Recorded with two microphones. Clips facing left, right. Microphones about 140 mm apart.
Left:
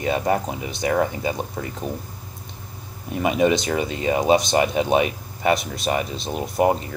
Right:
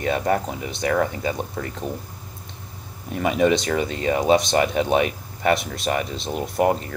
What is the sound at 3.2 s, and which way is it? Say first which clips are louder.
Speech: even; 20° left (ahead or behind).